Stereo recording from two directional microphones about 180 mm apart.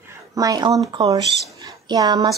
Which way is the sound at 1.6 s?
20° right (ahead or behind).